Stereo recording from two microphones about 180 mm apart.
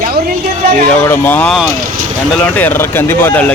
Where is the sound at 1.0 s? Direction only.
10° left (ahead or behind).